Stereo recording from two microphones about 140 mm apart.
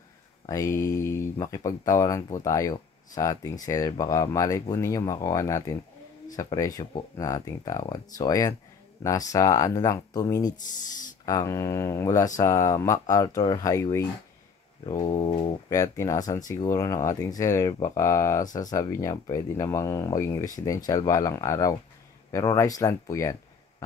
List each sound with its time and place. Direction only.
0.5 s speech: 20° left (ahead or behind)
14.9 s pigeon: 25° left (ahead or behind)
15.7 s speech: 20° left (ahead or behind)